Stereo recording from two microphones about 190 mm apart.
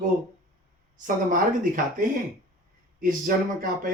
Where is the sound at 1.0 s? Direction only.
45° right (ahead or behind).